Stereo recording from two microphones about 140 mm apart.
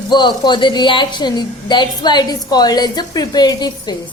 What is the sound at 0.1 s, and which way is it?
A woman's voice, 30° left (ahead or behind).